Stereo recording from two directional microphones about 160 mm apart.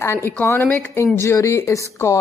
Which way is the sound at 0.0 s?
15° left (ahead or behind).